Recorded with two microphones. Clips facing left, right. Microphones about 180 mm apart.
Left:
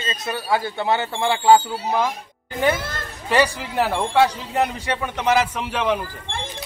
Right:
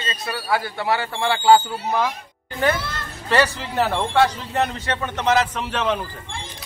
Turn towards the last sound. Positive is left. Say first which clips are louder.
# left 1 dB
turn(degrees=10)  # may be behind; listen again after turning